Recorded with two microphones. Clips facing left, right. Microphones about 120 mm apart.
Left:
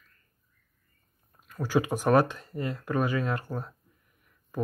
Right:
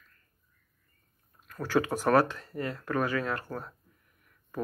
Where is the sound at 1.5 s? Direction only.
15° left (ahead or behind).